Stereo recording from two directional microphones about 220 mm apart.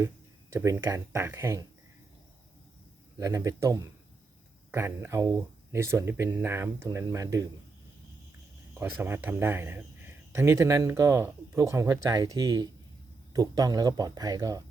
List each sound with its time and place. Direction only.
0.5 s speech: 15° right (ahead or behind)
3.2 s speech: 15° right (ahead or behind)
8.7 s speech: 10° right (ahead or behind)